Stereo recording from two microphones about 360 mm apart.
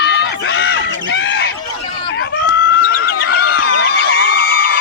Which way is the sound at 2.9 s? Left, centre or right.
Left.